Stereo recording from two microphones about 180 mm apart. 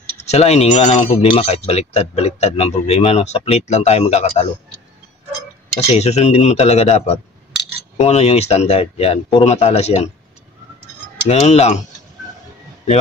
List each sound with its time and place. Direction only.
0.2 s speech: 35° left (ahead or behind)
5.8 s speech: 35° left (ahead or behind)
11.2 s speech: 35° left (ahead or behind)